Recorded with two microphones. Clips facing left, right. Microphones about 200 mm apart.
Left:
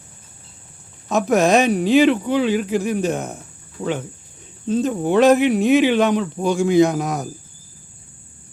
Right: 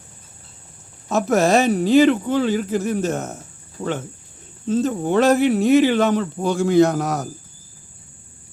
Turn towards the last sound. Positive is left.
turn(degrees=10)  # may be behind; listen again after turning